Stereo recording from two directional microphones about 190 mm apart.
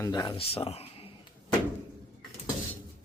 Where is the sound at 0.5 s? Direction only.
30° left (ahead or behind).